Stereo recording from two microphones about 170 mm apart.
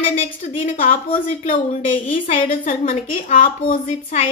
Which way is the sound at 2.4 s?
55° left (ahead or behind).